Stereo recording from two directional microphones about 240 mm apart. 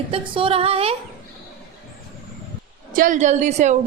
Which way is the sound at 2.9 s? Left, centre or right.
Right.